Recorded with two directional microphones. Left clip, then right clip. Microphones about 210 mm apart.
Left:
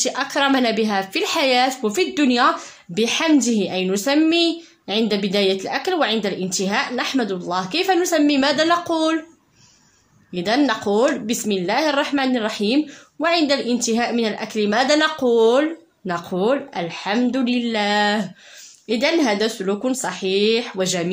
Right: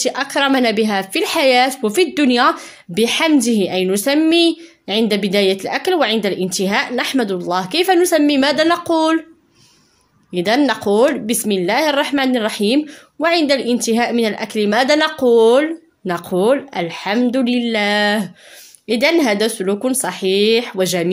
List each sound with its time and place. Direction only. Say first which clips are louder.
0.0 s speech: right 3 dB; 30° right (ahead or behind)
10.3 s speech: right 4 dB; 40° right (ahead or behind)